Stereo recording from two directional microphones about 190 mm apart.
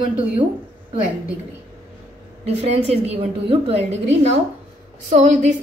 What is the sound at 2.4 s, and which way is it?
A woman's voice, 35° right (ahead or behind).